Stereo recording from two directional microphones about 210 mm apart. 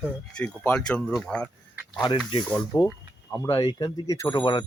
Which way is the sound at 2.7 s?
20° left (ahead or behind).